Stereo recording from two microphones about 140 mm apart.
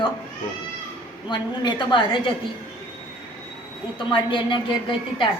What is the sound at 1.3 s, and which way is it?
A woman's voice, 35° left (ahead or behind).